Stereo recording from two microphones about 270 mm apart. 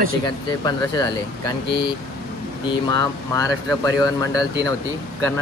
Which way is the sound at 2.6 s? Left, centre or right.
Centre.